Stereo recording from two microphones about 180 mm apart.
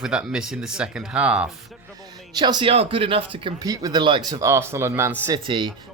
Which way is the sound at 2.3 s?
25° right (ahead or behind).